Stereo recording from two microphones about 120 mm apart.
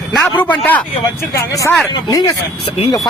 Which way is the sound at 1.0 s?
25° left (ahead or behind).